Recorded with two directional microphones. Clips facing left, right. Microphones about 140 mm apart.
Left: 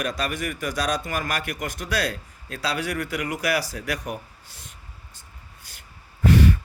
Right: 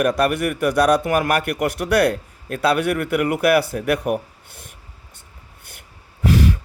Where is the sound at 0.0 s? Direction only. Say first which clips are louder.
Right 9 dB; 60° right (ahead or behind).